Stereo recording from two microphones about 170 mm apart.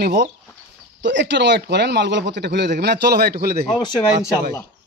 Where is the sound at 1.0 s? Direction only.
90° right; by 3.6 s 65° right (ahead or behind).